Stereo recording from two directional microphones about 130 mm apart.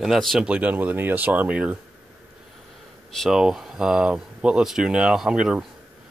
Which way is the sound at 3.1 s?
Centre (ahead or behind).